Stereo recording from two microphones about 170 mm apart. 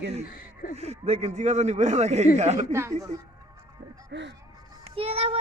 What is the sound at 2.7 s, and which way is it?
Speech, 15° right (ahead or behind).